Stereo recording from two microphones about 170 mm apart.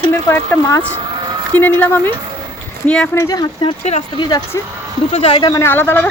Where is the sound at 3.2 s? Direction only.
20° left (ahead or behind).